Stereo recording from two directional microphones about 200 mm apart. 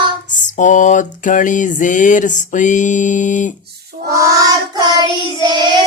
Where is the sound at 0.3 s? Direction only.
40° left (ahead or behind).